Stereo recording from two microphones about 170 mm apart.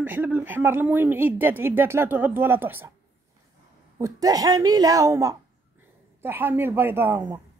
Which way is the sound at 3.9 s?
20° right (ahead or behind).